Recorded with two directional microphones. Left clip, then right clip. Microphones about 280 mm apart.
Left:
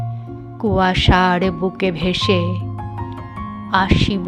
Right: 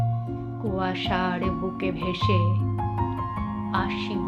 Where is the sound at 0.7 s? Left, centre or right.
Left.